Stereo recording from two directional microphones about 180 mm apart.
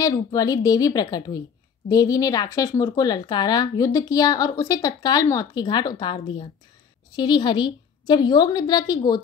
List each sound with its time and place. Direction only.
0.0 s speech: 20° left (ahead or behind)